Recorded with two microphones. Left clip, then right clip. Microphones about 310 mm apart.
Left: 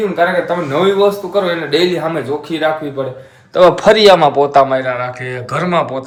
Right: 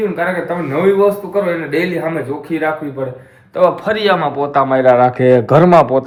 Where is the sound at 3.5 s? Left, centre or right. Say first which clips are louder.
Left 5 dB; left.